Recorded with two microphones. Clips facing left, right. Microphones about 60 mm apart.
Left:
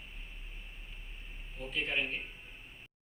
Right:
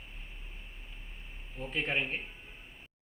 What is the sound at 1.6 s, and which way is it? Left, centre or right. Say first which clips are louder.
Speech: right 2 dB; right.